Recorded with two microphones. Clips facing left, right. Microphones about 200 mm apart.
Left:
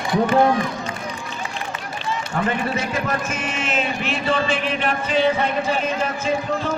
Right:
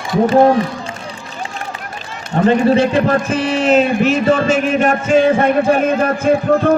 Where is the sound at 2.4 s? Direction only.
30° right (ahead or behind).